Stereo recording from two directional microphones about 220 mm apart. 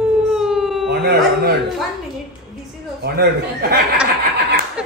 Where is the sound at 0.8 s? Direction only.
45° right (ahead or behind).